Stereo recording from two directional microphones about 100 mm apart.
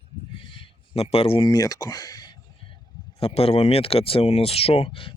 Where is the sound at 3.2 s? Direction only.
85° left; by 5.1 s 60° left (ahead or behind).